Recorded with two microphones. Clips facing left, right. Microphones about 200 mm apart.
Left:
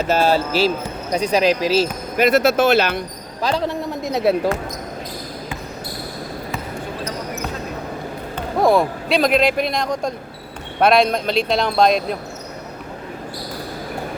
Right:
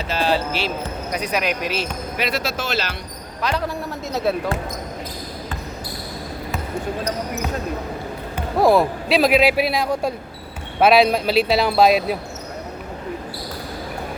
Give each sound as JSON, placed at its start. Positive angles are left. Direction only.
{"t": 0.0, "sound": "speech", "side_deg": 45}
{"t": 1.1, "sound": "speech", "side_deg": 25}
{"t": 2.1, "sound": "speech", "side_deg": 50}
{"t": 3.4, "sound": "speech", "side_deg": 30}
{"t": 8.5, "sound": "speech", "side_deg": 0}